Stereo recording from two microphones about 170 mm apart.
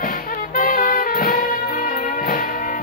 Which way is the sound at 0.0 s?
55° left (ahead or behind).